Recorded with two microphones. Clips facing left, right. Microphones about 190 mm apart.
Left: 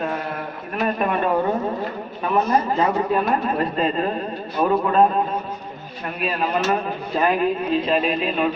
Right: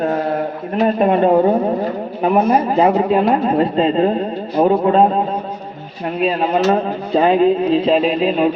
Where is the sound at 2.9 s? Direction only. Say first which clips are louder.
Right 6 dB; 20° right (ahead or behind).